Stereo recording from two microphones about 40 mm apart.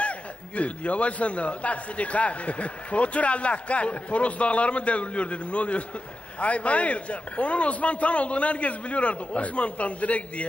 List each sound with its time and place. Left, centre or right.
0.0 s a man's voice: left